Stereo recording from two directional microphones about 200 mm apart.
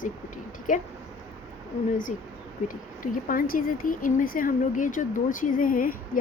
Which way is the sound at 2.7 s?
45° left (ahead or behind).